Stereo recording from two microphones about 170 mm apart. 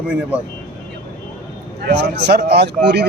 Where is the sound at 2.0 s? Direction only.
75° right (ahead or behind).